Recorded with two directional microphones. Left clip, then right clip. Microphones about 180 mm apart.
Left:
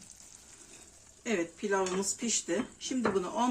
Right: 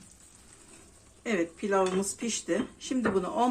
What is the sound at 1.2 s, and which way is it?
Speech, 15° right (ahead or behind).